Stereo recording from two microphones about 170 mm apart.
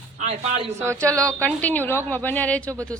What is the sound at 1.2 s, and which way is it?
A woman's voice, 10° left (ahead or behind).